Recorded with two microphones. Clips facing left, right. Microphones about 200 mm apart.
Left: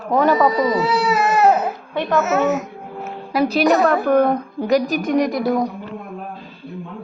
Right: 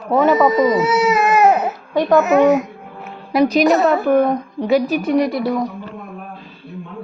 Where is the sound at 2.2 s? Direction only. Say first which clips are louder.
Right 6 dB; 15° right (ahead or behind).